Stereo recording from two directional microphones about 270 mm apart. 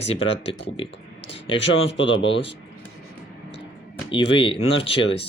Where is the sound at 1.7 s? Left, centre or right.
Left.